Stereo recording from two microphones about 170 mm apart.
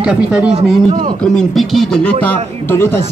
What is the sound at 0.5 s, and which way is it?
Speech, 35° right (ahead or behind).